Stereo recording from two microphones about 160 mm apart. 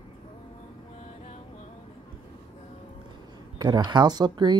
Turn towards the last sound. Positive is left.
turn(degrees=-25)  # may be behind; listen again after turning